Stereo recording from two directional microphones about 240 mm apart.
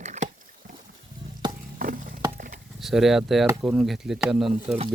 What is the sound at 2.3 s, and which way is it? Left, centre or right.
Chop, right.